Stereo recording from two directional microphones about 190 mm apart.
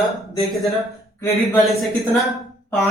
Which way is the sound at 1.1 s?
10° left (ahead or behind).